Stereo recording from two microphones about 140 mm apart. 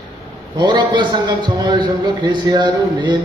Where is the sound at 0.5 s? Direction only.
30° right (ahead or behind).